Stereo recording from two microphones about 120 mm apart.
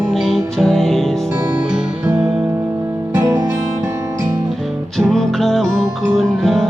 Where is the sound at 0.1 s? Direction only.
Centre (ahead or behind).